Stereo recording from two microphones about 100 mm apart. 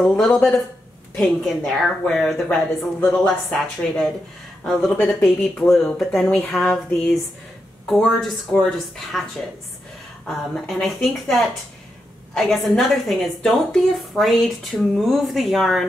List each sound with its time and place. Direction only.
1.1 s a woman's voice: 5° left (ahead or behind)
3.0 s a woman's voice: 15° left (ahead or behind)
10.2 s a woman's voice: 5° left (ahead or behind)